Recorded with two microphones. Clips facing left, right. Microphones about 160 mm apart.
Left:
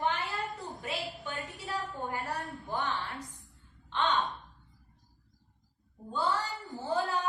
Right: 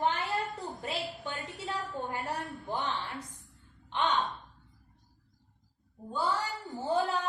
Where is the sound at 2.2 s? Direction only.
20° right (ahead or behind).